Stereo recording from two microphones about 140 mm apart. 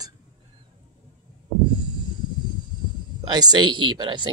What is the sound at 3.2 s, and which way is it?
Speech, 30° right (ahead or behind).